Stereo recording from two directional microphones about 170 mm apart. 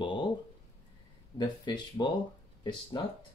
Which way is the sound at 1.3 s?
25° left (ahead or behind).